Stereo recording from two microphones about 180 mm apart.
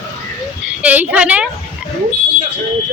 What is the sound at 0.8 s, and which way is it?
Speech, 10° right (ahead or behind).